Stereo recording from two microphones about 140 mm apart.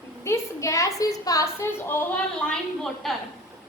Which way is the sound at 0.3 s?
20° left (ahead or behind).